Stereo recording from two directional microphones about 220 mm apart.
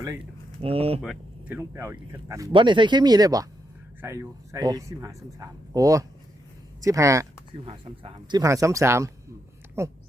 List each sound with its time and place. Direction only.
0.6 s speech: 25° right (ahead or behind)
1.0 s speech: 5° right (ahead or behind)
7.6 s speech: 25° right (ahead or behind)